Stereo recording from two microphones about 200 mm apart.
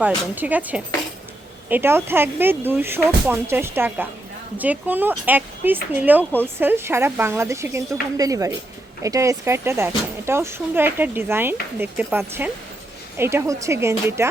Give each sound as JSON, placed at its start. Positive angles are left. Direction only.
{"t": 0.0, "sound": "speech", "side_deg": -10}